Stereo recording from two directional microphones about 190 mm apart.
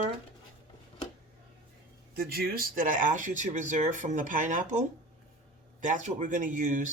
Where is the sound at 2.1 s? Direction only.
55° right (ahead or behind).